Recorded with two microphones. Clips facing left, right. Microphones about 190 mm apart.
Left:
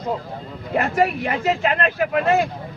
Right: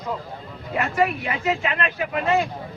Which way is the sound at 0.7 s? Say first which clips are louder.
Left 3 dB; 40° left (ahead or behind).